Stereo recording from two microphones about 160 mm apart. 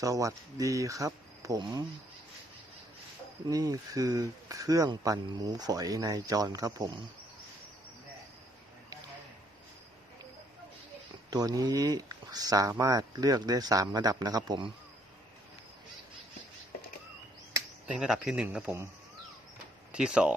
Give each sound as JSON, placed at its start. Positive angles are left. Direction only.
{"t": 0.0, "sound": "speech", "side_deg": -20}
{"t": 3.4, "sound": "speech", "side_deg": -20}
{"t": 11.3, "sound": "speech", "side_deg": -25}
{"t": 17.8, "sound": "speech", "side_deg": -5}
{"t": 19.9, "sound": "speech", "side_deg": -5}